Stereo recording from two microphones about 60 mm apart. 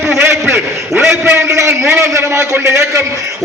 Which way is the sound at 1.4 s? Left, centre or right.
Right.